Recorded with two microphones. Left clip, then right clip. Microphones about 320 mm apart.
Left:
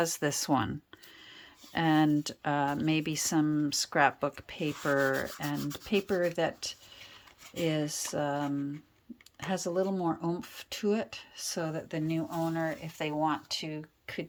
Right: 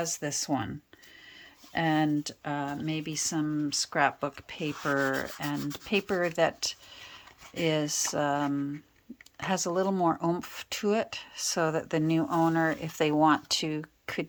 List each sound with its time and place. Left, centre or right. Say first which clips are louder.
0.0 s speech: left 2 dB; centre